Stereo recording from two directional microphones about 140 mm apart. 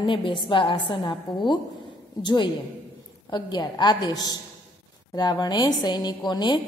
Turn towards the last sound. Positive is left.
turn(degrees=30)  # may be behind; listen again after turning